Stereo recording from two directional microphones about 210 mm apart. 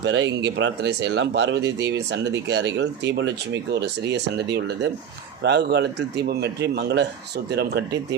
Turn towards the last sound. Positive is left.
turn(degrees=-50)  # may be behind; listen again after turning